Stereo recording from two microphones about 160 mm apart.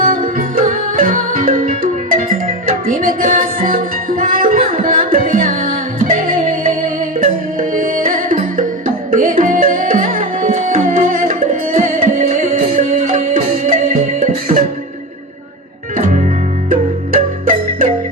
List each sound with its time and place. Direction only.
0.0 s music: 60° right (ahead or behind)
9.0 s tabla: 55° right (ahead or behind)
16.6 s music: 60° right (ahead or behind)